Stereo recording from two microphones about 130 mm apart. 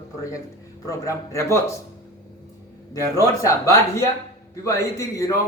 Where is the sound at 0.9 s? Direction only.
25° left (ahead or behind).